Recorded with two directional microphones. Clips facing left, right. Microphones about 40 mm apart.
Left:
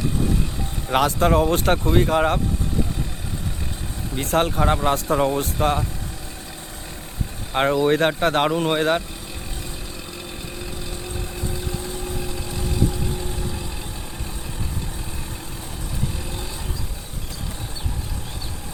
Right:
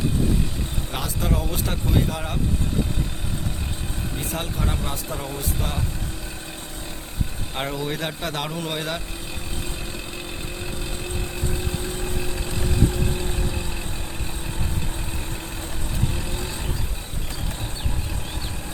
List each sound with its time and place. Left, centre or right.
0.9 s speech: left
4.2 s speech: left
7.5 s speech: left
7.9 s speech: left
12.5 s vehicle: right